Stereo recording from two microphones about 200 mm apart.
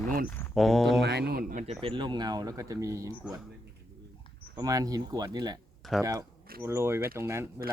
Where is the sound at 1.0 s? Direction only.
55° right (ahead or behind).